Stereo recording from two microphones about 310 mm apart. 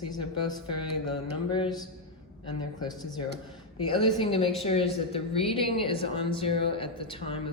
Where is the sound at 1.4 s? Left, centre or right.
Centre.